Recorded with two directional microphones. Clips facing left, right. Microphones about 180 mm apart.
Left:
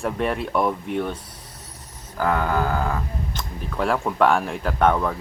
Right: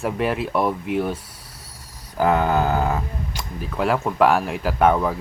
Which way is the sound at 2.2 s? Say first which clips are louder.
Right 3 dB; 20° right (ahead or behind).